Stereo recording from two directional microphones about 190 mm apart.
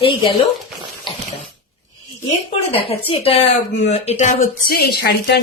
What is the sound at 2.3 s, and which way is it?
Speech, 30° left (ahead or behind).